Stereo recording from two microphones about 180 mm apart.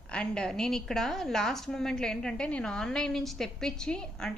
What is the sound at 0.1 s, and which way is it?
A woman's voice, 5° left (ahead or behind).